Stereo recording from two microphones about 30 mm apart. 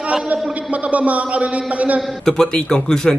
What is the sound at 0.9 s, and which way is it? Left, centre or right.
A man's voice, right.